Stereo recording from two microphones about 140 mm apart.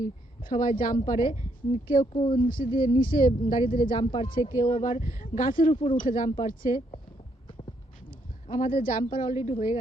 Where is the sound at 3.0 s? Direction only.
80° left.